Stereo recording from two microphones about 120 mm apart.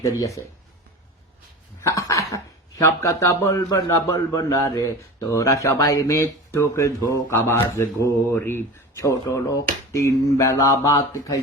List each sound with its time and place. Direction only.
0.0 s speech: 25° left (ahead or behind)
1.8 s speech: 25° left (ahead or behind)